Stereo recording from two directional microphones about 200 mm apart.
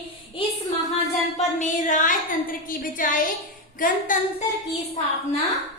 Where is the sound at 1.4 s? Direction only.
40° left (ahead or behind).